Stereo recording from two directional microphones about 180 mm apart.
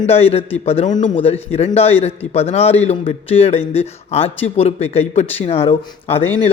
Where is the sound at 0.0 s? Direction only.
35° left (ahead or behind).